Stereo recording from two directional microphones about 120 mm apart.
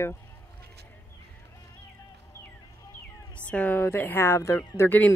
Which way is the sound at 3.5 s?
10° left (ahead or behind).